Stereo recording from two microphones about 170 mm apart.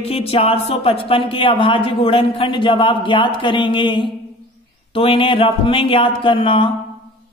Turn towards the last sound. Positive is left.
turn(degrees=30)  # may be behind; listen again after turning